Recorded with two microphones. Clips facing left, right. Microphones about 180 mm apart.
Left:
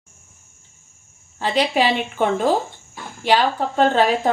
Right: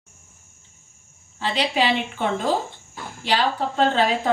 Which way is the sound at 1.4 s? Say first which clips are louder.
Left 4 dB; 45° left (ahead or behind).